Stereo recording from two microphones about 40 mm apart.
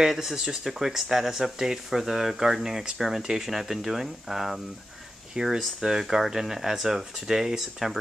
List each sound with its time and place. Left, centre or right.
0.1 s speech: centre